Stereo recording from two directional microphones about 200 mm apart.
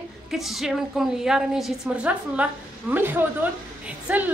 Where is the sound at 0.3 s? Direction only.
Centre (ahead or behind).